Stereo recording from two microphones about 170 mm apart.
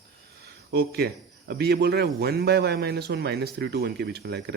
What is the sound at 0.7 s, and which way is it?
A man's voice, 70° right (ahead or behind).